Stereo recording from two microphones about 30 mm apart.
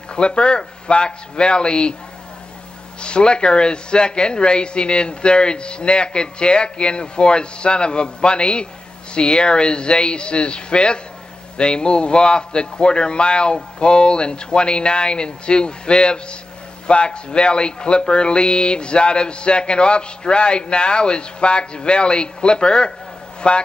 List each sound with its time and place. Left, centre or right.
0.1 s speech: left
3.0 s speech: left